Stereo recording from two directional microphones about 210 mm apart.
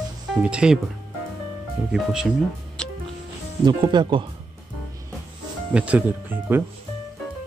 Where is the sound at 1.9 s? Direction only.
5° right (ahead or behind).